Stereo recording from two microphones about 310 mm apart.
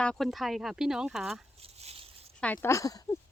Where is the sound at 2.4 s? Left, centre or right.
Centre.